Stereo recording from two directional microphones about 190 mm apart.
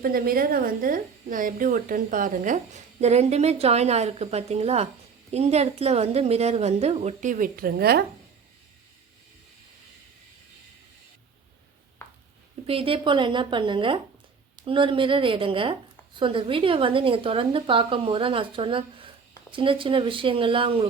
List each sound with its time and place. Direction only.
0.0 s a woman's voice: 50° right (ahead or behind)
12.0 s a sound: 15° left (ahead or behind)
12.6 s a woman's voice: 30° right (ahead or behind)